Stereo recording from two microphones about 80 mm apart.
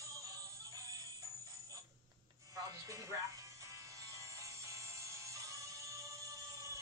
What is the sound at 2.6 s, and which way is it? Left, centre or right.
Music, right.